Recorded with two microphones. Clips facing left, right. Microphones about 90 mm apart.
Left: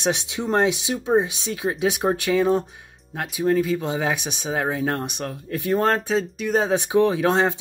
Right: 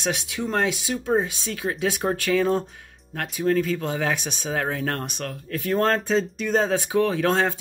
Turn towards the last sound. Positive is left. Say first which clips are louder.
# left 2 dB
turn(degrees=15)  # may be behind; listen again after turning